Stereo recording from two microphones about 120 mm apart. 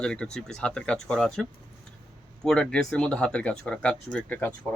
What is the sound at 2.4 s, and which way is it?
Speech, 5° left (ahead or behind).